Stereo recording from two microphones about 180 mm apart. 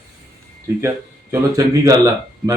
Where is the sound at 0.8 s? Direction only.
15° right (ahead or behind).